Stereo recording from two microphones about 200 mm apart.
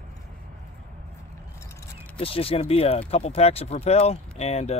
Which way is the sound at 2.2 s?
30° left (ahead or behind).